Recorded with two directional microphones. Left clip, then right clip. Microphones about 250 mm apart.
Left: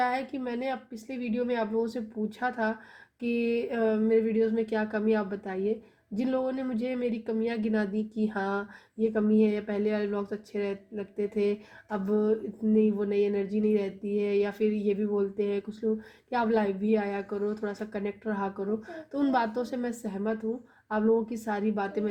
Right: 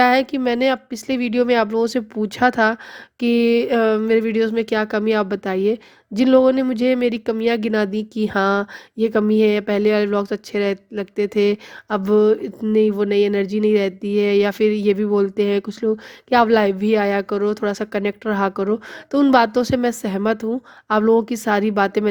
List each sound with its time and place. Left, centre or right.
0.0 s speech: right